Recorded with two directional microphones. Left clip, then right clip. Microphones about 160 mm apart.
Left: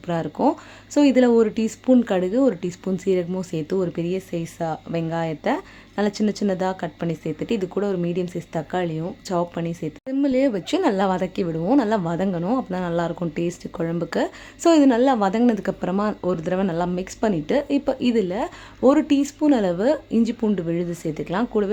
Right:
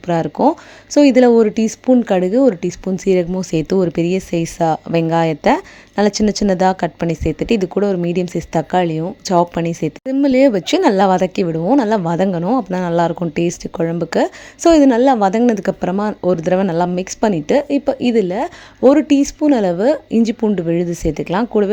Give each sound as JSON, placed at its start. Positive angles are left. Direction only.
{"t": 0.1, "sound": "speech", "side_deg": -35}